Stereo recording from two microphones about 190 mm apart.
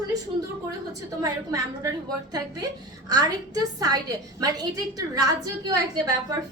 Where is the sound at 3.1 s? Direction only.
20° right (ahead or behind).